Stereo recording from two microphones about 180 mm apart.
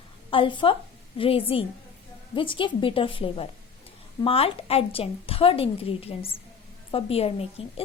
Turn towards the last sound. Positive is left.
turn(degrees=30)  # may be behind; listen again after turning